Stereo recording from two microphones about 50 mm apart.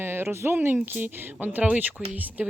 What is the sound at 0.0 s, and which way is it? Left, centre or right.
Speech, right.